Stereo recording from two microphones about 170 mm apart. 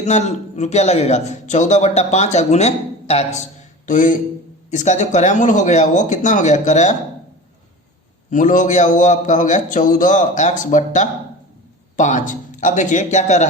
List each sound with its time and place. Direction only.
0.0 s a man's voice: 40° left (ahead or behind)
3.8 s a man's voice: 50° left (ahead or behind)
8.3 s a man's voice: 50° left (ahead or behind)